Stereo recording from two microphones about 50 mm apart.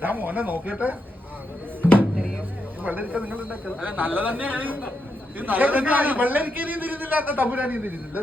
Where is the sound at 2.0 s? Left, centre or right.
Right.